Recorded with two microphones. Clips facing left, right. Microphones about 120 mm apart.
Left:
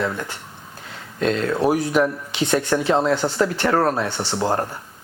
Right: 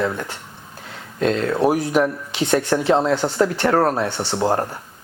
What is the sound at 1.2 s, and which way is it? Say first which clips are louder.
Speech: right 2 dB; 20° right (ahead or behind).